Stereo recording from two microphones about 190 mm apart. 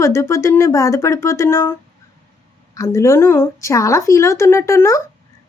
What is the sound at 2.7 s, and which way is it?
A woman's voice, 15° left (ahead or behind).